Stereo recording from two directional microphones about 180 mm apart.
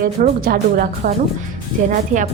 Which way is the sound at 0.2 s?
50° right (ahead or behind).